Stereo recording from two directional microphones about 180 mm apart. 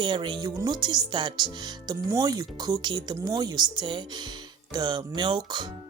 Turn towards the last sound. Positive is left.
turn(degrees=-25)  # may be behind; listen again after turning